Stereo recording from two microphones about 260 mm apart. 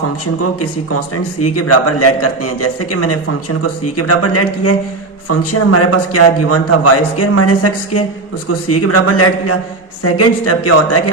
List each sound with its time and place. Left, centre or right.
0.6 s a man's voice: left